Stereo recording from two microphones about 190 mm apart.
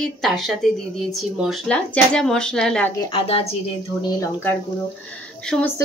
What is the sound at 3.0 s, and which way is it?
Speech, 30° left (ahead or behind).